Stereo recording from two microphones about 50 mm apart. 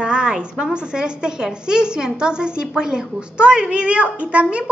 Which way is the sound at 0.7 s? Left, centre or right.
Centre.